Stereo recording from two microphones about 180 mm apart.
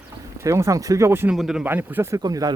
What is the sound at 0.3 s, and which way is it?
Speech, 15° right (ahead or behind).